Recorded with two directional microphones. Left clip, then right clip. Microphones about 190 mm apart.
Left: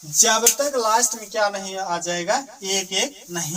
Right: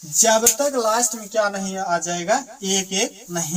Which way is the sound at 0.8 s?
10° left (ahead or behind).